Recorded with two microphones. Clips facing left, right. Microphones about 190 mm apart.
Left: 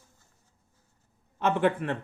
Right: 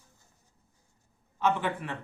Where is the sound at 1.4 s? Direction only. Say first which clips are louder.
Left 4 dB; 55° left (ahead or behind).